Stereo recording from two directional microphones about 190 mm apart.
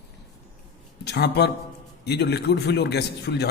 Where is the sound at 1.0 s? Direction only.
60° left (ahead or behind).